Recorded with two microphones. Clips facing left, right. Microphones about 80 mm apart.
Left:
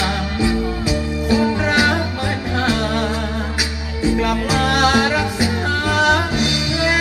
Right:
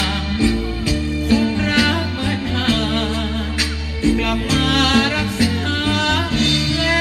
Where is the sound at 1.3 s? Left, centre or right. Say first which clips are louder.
Left 1 dB; left.